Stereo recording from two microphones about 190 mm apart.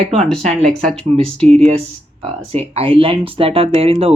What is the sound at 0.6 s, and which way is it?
Speech, 5° left (ahead or behind).